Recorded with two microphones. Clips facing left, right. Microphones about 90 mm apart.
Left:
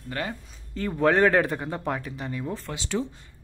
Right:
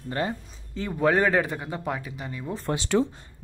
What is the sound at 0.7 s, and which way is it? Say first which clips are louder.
Speech: left 1 dB; 5° right (ahead or behind).